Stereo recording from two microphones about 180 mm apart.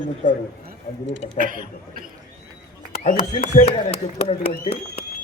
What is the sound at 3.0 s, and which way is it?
Speech, 50° left (ahead or behind).